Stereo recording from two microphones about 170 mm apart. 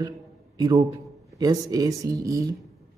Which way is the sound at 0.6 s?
25° right (ahead or behind).